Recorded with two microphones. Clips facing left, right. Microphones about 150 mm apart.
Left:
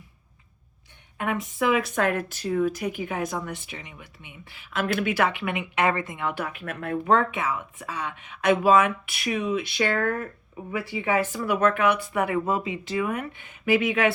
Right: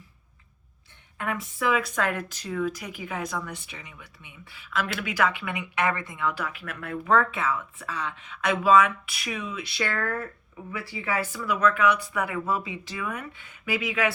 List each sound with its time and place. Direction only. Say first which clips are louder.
1.2 s speech: left 3 dB; 20° left (ahead or behind)